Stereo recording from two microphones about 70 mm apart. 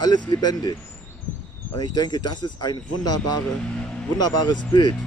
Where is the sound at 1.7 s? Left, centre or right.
Left.